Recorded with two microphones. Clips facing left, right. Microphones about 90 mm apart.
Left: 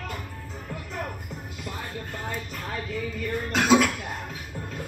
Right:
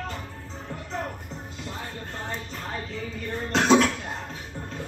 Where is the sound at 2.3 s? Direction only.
30° right (ahead or behind).